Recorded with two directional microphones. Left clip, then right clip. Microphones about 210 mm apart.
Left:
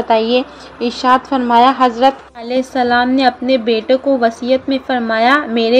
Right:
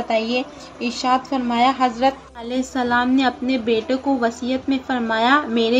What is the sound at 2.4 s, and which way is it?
A woman's voice, 25° left (ahead or behind).